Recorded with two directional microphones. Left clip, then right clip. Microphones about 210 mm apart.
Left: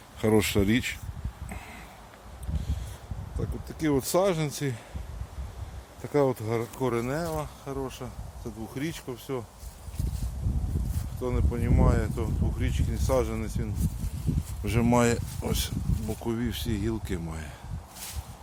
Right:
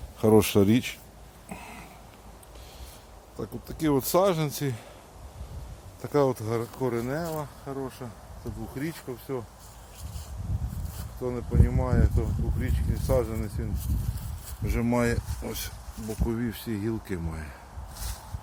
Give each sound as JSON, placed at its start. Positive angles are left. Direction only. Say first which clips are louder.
{"t": 0.2, "sound": "speech", "louder": "right 4 dB", "side_deg": -10}
{"t": 3.7, "sound": "speech", "louder": "right 1 dB", "side_deg": 0}
{"t": 6.0, "sound": "speech", "louder": "right 1 dB", "side_deg": 0}
{"t": 11.2, "sound": "speech", "louder": "right 1 dB", "side_deg": 5}
{"t": 14.6, "sound": "speech", "louder": "left 3 dB", "side_deg": 25}
{"t": 16.0, "sound": "speech", "louder": "right 1 dB", "side_deg": 5}